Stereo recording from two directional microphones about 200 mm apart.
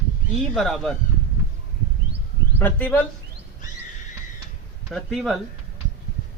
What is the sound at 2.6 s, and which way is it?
Speech, 10° left (ahead or behind).